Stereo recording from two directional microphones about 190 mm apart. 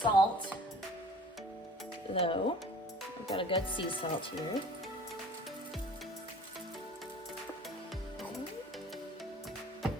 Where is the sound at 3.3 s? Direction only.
25° left (ahead or behind).